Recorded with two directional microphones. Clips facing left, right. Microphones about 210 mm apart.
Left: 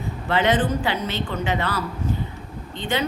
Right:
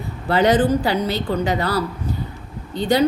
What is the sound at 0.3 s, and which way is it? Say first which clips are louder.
A woman's voice: right 5 dB; 40° right (ahead or behind).